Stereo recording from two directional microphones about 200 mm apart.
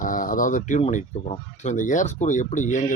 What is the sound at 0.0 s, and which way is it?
Speech, 40° left (ahead or behind).